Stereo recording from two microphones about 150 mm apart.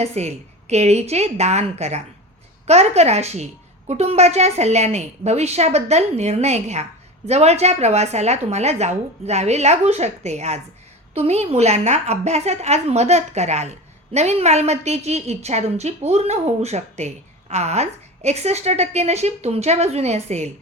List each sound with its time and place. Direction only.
0.0 s a woman's voice: 45° right (ahead or behind)